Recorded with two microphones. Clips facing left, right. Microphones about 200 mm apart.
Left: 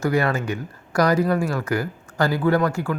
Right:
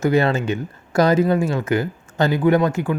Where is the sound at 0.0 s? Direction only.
25° right (ahead or behind).